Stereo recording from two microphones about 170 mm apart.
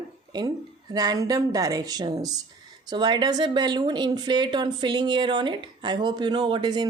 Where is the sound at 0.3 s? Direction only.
25° right (ahead or behind).